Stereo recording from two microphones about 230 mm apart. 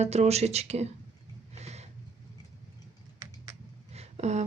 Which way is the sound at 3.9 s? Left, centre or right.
Right.